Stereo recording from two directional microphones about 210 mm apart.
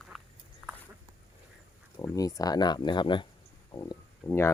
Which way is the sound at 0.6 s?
5° right (ahead or behind).